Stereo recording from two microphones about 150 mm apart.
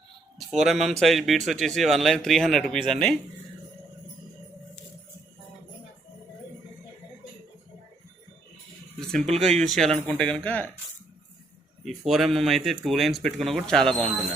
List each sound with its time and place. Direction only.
0.6 s speech: centre (ahead or behind)
9.0 s speech: centre (ahead or behind)
11.9 s speech: centre (ahead or behind)